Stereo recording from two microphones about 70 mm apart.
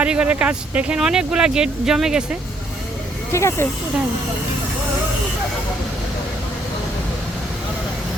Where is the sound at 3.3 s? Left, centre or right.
Left.